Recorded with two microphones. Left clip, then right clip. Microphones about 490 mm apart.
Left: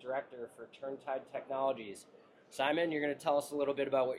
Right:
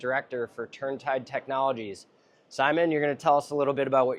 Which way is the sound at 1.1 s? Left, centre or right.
Right.